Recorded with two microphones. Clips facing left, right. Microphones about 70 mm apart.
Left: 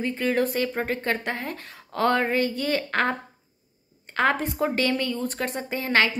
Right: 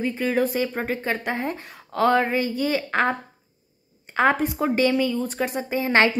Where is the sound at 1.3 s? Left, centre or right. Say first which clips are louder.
Right 4 dB; right.